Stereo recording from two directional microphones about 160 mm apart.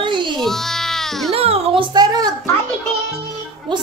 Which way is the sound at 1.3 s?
40° right (ahead or behind).